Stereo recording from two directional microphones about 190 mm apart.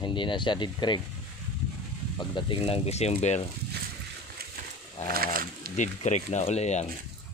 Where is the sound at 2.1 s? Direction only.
25° left (ahead or behind).